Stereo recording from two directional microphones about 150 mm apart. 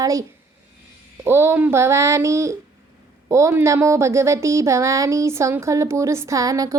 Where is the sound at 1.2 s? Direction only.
15° right (ahead or behind).